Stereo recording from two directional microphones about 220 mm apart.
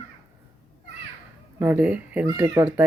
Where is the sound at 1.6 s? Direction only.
5° right (ahead or behind).